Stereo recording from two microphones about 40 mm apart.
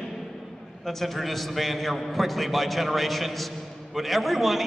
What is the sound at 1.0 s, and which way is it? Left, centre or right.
A man's voice, centre.